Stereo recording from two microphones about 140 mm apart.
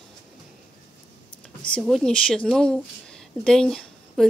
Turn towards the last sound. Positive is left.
turn(degrees=5)  # may be behind; listen again after turning